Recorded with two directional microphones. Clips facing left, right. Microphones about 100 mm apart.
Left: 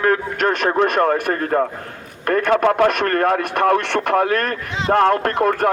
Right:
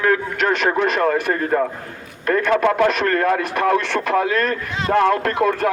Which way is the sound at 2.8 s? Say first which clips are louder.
Left 1 dB; 55° left (ahead or behind).